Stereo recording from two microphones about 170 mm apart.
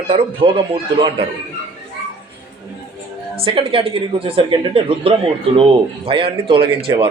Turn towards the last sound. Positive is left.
turn(degrees=-30)  # may be behind; listen again after turning